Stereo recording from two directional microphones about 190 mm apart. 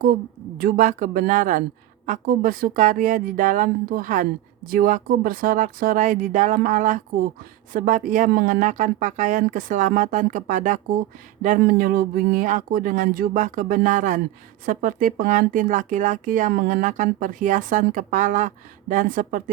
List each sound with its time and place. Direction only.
0.6 s speech: 45° right (ahead or behind)